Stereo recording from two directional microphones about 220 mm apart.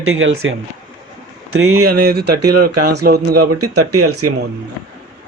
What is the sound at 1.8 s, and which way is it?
Speech, 45° right (ahead or behind).